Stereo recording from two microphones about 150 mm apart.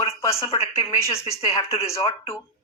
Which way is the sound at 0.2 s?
20° left (ahead or behind).